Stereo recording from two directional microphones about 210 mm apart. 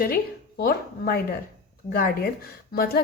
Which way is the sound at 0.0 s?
45° left (ahead or behind).